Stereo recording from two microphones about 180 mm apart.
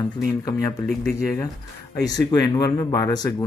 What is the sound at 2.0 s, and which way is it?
Speech, 20° left (ahead or behind).